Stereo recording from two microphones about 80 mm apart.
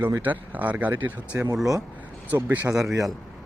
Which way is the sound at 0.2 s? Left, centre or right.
Right.